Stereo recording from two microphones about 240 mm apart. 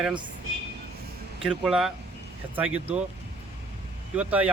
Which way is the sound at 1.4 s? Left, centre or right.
Centre.